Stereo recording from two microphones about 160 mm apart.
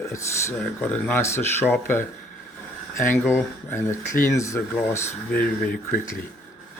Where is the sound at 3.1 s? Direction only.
15° left (ahead or behind).